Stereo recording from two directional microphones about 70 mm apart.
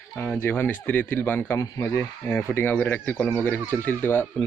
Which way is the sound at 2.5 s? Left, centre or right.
Left.